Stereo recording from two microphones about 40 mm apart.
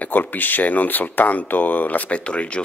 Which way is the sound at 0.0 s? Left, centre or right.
Left.